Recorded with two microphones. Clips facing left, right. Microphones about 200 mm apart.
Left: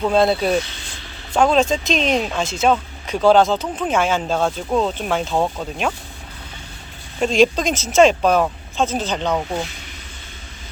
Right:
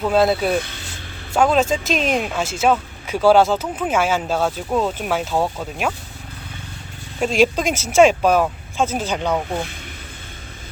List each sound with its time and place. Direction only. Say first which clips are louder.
0.0 s speech: even; 5° right (ahead or behind)
0.5 s speech: left 1 dB; 55° right (ahead or behind)
1.3 s speech: left 1 dB; 5° right (ahead or behind)
7.2 s speech: left 1 dB; 5° right (ahead or behind)